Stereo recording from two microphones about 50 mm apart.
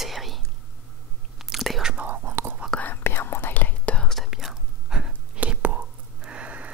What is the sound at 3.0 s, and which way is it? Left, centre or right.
Whispering, left.